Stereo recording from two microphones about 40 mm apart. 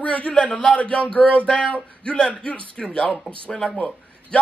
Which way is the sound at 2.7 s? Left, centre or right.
Left.